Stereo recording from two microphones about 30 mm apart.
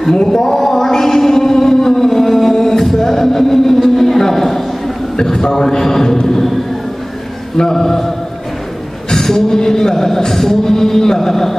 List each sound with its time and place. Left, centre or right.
0.1 s a man's voice: centre
0.6 s music: centre
5.1 s a man's voice: centre
7.5 s a man's voice: centre
9.1 s a man's voice: centre